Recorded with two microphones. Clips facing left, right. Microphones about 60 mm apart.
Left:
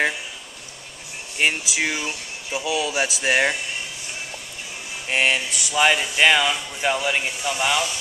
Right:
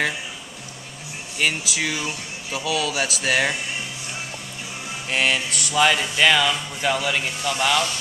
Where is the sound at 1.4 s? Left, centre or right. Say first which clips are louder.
Left 1 dB; left.